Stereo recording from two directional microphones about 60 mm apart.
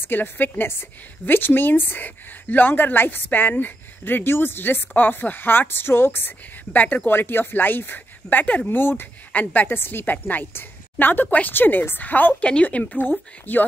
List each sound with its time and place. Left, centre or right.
0.0 s a woman's voice: left